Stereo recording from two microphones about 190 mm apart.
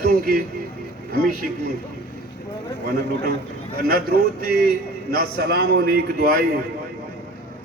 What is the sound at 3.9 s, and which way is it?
A man's voice, 55° right (ahead or behind).